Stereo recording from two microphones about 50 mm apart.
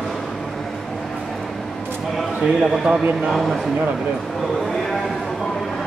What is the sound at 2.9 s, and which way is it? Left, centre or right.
Speech, right.